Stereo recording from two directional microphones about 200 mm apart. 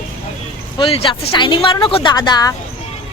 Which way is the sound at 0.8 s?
25° left (ahead or behind).